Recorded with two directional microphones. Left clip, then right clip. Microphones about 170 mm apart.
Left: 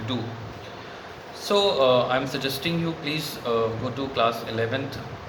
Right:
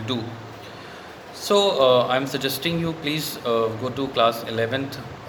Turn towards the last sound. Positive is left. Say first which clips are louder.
# right 2 dB
turn(degrees=-45)  # may be behind; listen again after turning